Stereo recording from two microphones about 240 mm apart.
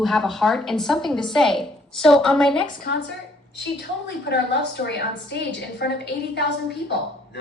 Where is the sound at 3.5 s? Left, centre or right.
Left.